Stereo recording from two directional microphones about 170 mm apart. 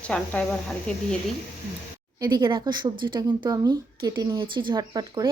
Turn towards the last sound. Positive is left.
turn(degrees=-25)  # may be behind; listen again after turning